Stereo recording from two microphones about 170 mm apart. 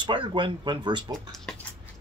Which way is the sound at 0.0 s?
30° right (ahead or behind).